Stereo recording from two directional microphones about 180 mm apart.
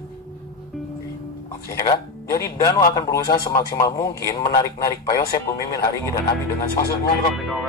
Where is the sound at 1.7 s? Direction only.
20° left (ahead or behind).